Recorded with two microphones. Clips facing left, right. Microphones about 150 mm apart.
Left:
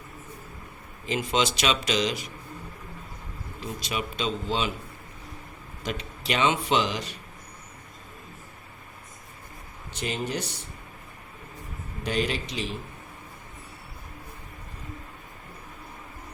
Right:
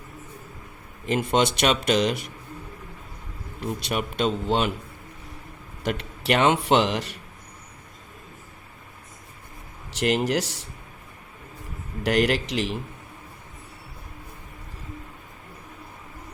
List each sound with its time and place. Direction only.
1.0 s a man's voice: 55° right (ahead or behind)
3.6 s a man's voice: 60° right (ahead or behind)
5.8 s a man's voice: 65° right (ahead or behind)
9.9 s speech: 75° right (ahead or behind)
12.0 s speech: 75° right (ahead or behind)